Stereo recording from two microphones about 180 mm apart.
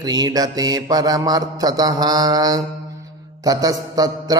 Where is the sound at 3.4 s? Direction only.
20° right (ahead or behind).